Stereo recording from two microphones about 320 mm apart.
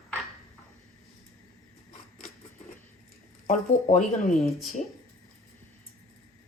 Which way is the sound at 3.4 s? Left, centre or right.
Left.